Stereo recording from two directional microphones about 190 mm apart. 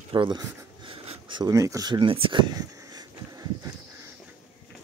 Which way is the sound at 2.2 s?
25° right (ahead or behind).